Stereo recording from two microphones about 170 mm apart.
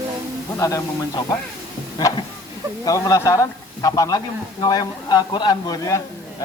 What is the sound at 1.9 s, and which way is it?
Speech, 25° left (ahead or behind).